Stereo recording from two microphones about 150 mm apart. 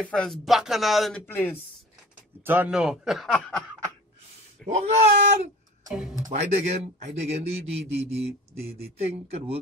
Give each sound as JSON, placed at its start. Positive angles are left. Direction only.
{"t": 0.0, "sound": "speech", "side_deg": 5}
{"t": 1.2, "sound": "speech", "side_deg": 15}
{"t": 2.4, "sound": "speech", "side_deg": -10}
{"t": 4.6, "sound": "speech", "side_deg": -50}